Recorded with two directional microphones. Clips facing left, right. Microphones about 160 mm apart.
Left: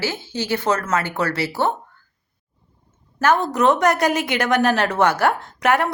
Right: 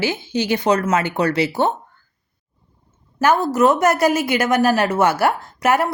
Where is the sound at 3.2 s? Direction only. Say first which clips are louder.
Right 2 dB; 10° right (ahead or behind).